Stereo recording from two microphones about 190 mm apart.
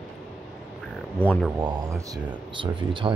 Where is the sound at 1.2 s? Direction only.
5° left (ahead or behind).